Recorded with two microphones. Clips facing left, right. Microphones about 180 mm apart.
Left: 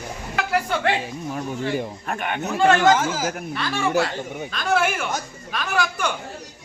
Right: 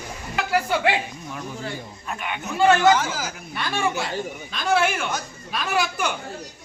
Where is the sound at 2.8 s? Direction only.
45° left (ahead or behind).